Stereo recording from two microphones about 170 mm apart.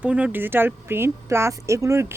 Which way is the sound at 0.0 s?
10° right (ahead or behind).